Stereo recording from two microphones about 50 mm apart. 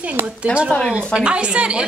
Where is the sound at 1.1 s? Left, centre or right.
Right.